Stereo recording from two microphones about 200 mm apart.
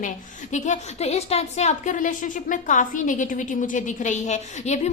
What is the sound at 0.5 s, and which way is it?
A woman's voice, 35° left (ahead or behind).